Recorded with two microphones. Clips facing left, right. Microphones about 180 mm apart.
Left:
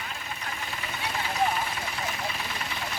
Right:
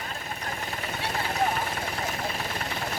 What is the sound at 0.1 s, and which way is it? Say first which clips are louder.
Vehicle: right 2 dB; 45° right (ahead or behind).